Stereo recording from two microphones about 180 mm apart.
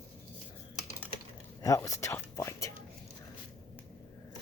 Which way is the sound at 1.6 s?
20° left (ahead or behind).